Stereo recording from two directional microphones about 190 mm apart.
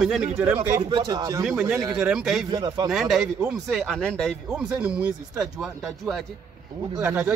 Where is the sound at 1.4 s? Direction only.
5° right (ahead or behind).